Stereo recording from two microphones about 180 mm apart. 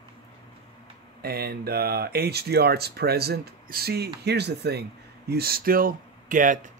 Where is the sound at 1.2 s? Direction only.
60° right (ahead or behind).